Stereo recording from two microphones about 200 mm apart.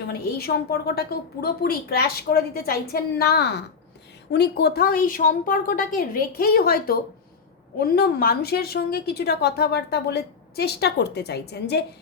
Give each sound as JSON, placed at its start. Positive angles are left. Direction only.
{"t": 0.1, "sound": "a woman's voice", "side_deg": 50}